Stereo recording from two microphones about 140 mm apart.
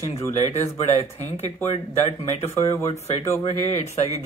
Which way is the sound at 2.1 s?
50° left (ahead or behind).